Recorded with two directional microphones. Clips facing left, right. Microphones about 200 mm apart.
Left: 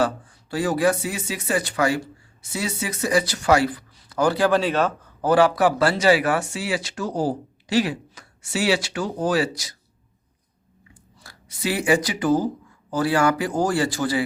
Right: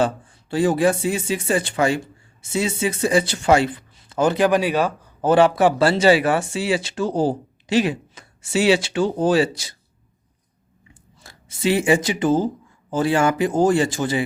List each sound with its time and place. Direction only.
0.0 s speech: 25° right (ahead or behind)
5.2 s speech: 25° right (ahead or behind)
11.2 s speech: 25° right (ahead or behind)